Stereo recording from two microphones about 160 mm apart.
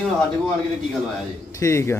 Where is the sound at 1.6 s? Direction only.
20° left (ahead or behind).